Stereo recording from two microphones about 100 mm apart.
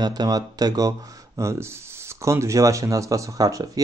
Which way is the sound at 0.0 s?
40° right (ahead or behind).